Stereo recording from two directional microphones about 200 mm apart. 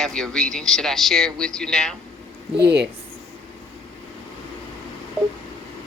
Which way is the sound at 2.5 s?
55° right (ahead or behind).